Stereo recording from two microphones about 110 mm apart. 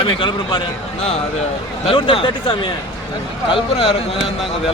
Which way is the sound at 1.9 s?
55° left (ahead or behind).